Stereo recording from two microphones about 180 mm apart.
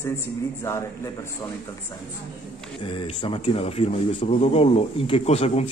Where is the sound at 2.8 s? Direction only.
30° left (ahead or behind).